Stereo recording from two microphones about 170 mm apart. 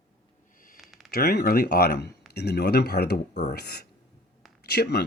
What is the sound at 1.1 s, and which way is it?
Speech, 65° left (ahead or behind).